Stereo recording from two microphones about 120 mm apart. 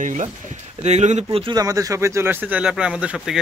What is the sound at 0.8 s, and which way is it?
Speech, 70° right (ahead or behind).